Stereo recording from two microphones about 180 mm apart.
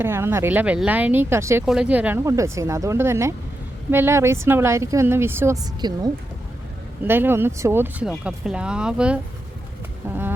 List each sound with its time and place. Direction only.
0.0 s speech: 15° right (ahead or behind)
1.6 s speech: 5° right (ahead or behind); by 6.0 s 25° right (ahead or behind)
7.0 s speech: 10° right (ahead or behind)
10.1 s insect: 10° right (ahead or behind)